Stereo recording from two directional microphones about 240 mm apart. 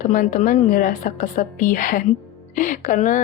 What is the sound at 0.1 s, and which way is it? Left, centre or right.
A woman's voice, left.